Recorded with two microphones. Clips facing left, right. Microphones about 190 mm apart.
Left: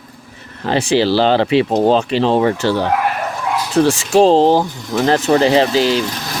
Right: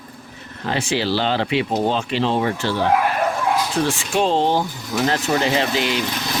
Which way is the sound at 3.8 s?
65° left (ahead or behind).